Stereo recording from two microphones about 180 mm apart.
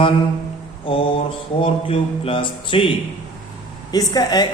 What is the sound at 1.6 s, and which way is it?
A woman's voice, 30° left (ahead or behind).